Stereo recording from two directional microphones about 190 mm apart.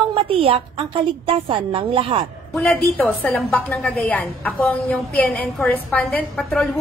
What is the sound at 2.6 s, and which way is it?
A woman's voice, 10° left (ahead or behind).